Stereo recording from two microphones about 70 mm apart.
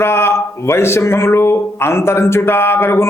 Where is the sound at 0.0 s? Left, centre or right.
Left.